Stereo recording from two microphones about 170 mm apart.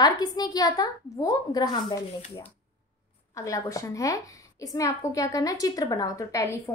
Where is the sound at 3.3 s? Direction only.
20° left (ahead or behind).